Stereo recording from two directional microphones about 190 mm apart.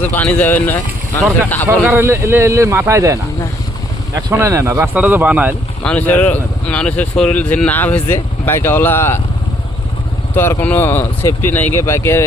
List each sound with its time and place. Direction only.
0.0 s speech: 10° left (ahead or behind)
1.8 s speech: 10° right (ahead or behind)
5.8 s speech: 5° left (ahead or behind)
10.3 s speech: 10° left (ahead or behind)